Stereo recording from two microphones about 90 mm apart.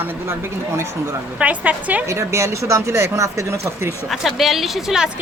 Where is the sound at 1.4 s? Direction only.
15° right (ahead or behind).